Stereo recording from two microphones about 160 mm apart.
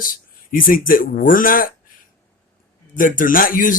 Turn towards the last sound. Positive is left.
turn(degrees=60)  # may be behind; listen again after turning